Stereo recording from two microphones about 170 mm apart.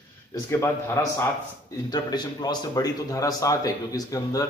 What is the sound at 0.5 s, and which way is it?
A man's voice, 15° left (ahead or behind).